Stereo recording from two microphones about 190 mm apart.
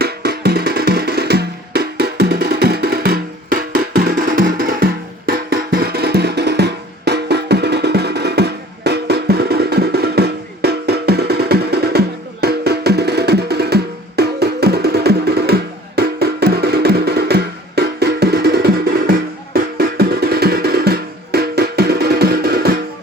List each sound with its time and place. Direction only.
0.0 s music: 55° right (ahead or behind)